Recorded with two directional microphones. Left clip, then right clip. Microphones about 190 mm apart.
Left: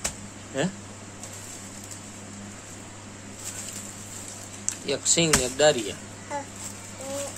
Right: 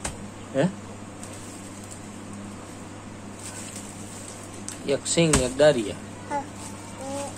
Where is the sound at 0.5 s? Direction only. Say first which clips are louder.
Right 4 dB; centre (ahead or behind).